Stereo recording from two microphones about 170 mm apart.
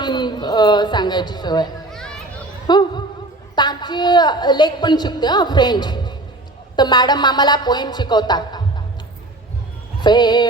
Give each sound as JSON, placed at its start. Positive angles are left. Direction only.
{"t": 0.0, "sound": "speech", "side_deg": 25}
{"t": 1.9, "sound": "children playing", "side_deg": 5}
{"t": 2.6, "sound": "a sound", "side_deg": 25}
{"t": 3.5, "sound": "a woman's voice", "side_deg": 25}
{"t": 10.0, "sound": "speech", "side_deg": 25}